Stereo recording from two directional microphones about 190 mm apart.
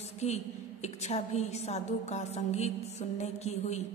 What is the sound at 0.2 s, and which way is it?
A woman's voice, 35° left (ahead or behind).